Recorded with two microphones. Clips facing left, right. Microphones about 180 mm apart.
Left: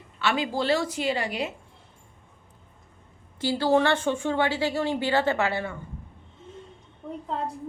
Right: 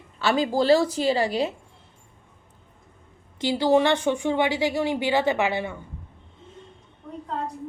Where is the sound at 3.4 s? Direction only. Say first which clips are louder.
Right 2 dB; 15° right (ahead or behind).